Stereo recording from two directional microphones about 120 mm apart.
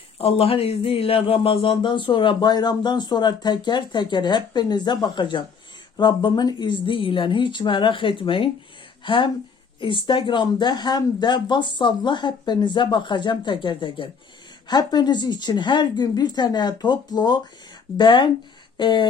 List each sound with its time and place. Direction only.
0.2 s speech: 55° left (ahead or behind)